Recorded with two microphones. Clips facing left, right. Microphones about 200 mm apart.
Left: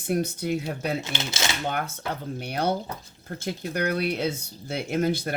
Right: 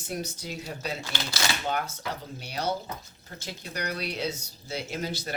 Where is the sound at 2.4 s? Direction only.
55° left (ahead or behind).